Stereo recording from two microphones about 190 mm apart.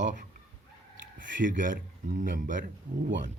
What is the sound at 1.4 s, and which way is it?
Speech, 45° right (ahead or behind).